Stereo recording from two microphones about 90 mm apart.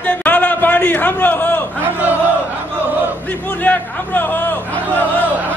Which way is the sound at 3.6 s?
20° left (ahead or behind).